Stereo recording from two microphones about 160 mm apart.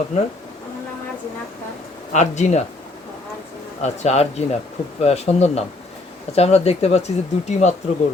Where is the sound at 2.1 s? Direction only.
45° left (ahead or behind).